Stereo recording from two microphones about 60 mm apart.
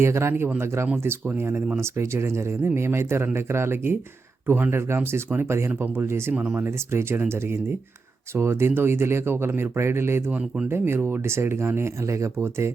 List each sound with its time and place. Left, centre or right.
0.0 s speech: right
6.3 s speech: right
6.6 s speech: right